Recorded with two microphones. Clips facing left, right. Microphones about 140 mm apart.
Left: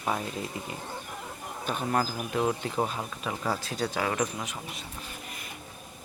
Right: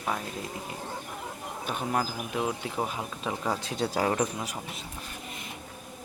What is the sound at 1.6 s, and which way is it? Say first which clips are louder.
Speech: left 1 dB; 10° right (ahead or behind).